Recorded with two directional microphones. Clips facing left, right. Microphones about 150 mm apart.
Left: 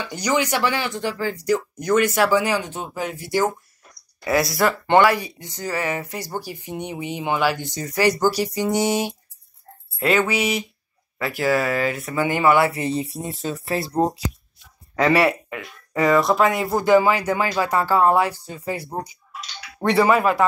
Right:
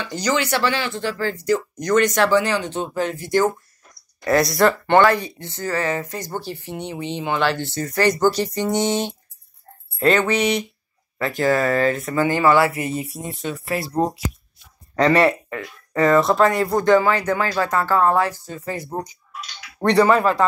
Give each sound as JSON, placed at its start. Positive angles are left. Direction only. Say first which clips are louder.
{"t": 0.0, "sound": "speech", "louder": "even", "side_deg": 10}
{"t": 4.8, "sound": "speech", "louder": "right 1 dB", "side_deg": 15}
{"t": 12.1, "sound": "speech", "louder": "even", "side_deg": 15}
{"t": 15.0, "sound": "speech", "louder": "right 2 dB", "side_deg": 5}